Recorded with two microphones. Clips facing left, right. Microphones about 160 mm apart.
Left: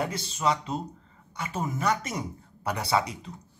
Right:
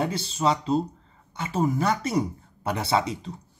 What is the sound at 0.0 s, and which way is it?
A man's voice, 30° right (ahead or behind).